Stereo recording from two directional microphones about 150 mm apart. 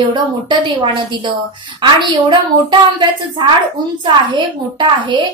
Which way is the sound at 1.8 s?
30° right (ahead or behind).